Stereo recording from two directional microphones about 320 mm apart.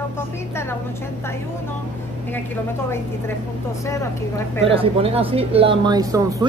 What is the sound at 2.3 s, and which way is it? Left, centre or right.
A woman's voice, centre.